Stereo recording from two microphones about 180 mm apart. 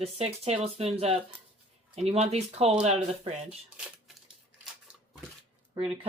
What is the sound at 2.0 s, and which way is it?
Speech, 35° right (ahead or behind).